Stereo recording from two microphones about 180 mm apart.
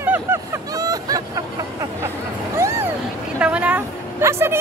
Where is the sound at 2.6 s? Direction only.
15° right (ahead or behind).